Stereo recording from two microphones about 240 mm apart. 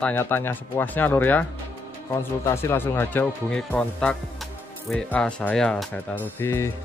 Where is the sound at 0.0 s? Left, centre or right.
Centre.